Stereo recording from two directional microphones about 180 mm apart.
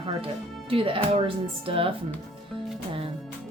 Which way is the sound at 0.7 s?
30° right (ahead or behind).